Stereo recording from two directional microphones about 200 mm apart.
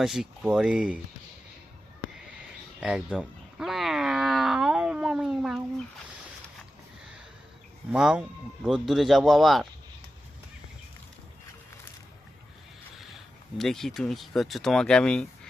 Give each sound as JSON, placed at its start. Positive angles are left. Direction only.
{"t": 0.0, "sound": "speech", "side_deg": 0}
{"t": 2.8, "sound": "a sound", "side_deg": -5}
{"t": 7.9, "sound": "speech", "side_deg": -5}
{"t": 13.6, "sound": "speech", "side_deg": 0}